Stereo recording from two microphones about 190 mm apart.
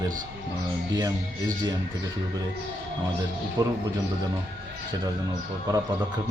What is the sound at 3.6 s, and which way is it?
Speech, 20° right (ahead or behind).